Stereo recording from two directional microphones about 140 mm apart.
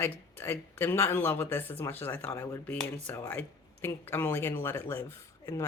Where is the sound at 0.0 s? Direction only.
15° left (ahead or behind).